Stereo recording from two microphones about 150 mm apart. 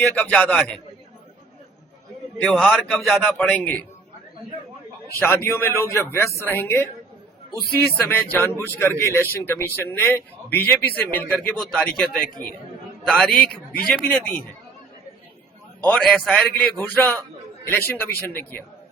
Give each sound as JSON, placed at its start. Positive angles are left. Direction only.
{"t": 0.1, "sound": "a man's voice", "side_deg": 10}
{"t": 2.4, "sound": "a man's voice", "side_deg": 5}
{"t": 5.2, "sound": "a man's voice", "side_deg": 15}
{"t": 15.9, "sound": "a man's voice", "side_deg": 0}